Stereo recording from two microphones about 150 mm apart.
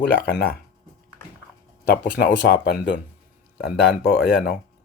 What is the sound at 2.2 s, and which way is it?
Speech, 90° left.